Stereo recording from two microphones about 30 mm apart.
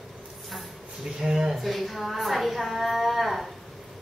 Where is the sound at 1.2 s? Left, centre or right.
Right.